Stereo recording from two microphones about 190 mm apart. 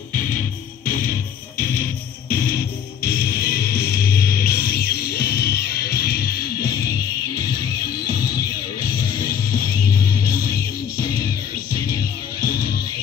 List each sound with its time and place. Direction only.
1.6 s music: 50° left (ahead or behind)
6.6 s music: 20° left (ahead or behind)